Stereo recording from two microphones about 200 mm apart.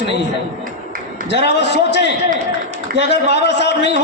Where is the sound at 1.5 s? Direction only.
60° left (ahead or behind).